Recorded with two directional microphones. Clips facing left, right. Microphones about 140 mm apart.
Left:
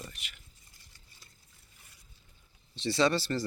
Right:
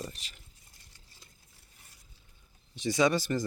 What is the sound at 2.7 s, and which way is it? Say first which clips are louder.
Speech: right 1 dB; 15° right (ahead or behind).